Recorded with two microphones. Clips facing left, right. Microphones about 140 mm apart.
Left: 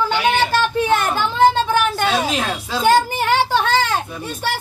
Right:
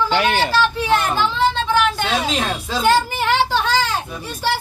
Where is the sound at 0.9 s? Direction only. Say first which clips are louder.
Even; 50° left (ahead or behind).